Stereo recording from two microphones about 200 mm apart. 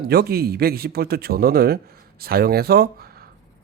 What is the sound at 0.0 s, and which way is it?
Speech, 50° right (ahead or behind).